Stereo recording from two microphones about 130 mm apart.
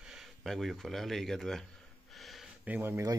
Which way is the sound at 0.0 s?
5° right (ahead or behind).